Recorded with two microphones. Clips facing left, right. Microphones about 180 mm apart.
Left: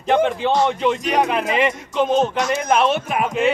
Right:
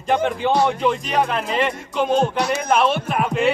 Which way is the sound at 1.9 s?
5° right (ahead or behind).